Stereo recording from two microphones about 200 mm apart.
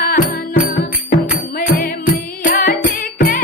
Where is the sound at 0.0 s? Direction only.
45° left (ahead or behind).